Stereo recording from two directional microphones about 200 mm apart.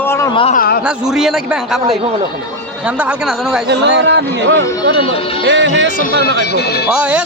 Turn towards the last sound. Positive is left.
turn(degrees=-5)  # may be behind; listen again after turning